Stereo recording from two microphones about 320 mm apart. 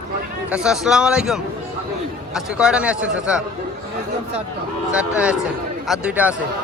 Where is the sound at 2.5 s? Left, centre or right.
Centre.